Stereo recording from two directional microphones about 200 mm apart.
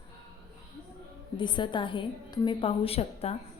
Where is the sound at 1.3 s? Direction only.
25° left (ahead or behind).